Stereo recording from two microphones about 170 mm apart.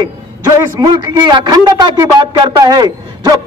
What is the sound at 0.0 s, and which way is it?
A man's voice, 20° right (ahead or behind).